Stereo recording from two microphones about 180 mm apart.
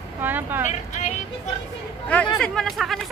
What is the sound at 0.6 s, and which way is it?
Speech, 40° left (ahead or behind).